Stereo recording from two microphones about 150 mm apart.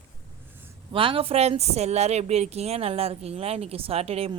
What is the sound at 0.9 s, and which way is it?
Speech, 35° right (ahead or behind).